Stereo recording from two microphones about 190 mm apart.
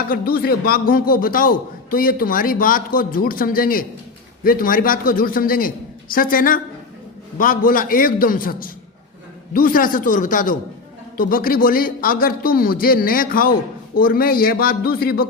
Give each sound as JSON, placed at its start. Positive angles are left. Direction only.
{"t": 0.1, "sound": "a man's voice", "side_deg": 50}